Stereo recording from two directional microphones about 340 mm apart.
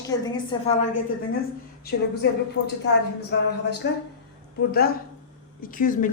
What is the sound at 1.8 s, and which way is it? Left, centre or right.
Speech, left.